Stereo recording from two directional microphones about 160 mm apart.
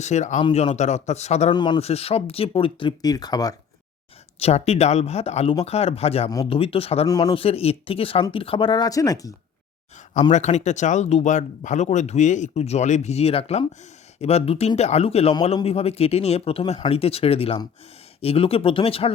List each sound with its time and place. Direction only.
0.0 s speech: 45° left (ahead or behind)
1.5 s a man's voice: 25° left (ahead or behind)
1.8 s speech: 40° left (ahead or behind); by 3.5 s 25° left (ahead or behind)
4.4 s speech: 40° left (ahead or behind)
7.1 s a man's voice: 25° left (ahead or behind)
7.3 s speech: 35° left (ahead or behind); by 9.3 s 20° left (ahead or behind)
10.3 s speech: 45° left (ahead or behind)